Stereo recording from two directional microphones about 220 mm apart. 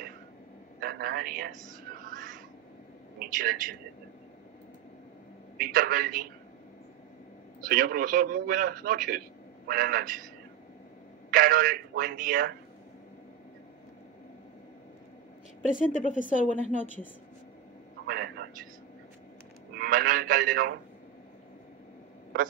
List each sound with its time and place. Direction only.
0.7 s a man's voice: 40° right (ahead or behind)
2.1 s a sound: 40° right (ahead or behind)
3.2 s a man's voice: 40° right (ahead or behind)
5.6 s a man's voice: 40° right (ahead or behind)
7.6 s a man's voice: 40° right (ahead or behind)
11.2 s a man's voice: 40° right (ahead or behind)
15.7 s a woman's voice: 35° left (ahead or behind)
16.7 s a woman's voice: 10° left (ahead or behind)
18.0 s a man's voice: 45° right (ahead or behind)
19.7 s a man's voice: 40° right (ahead or behind)